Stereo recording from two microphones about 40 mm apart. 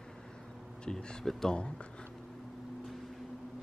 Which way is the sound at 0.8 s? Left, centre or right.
Left.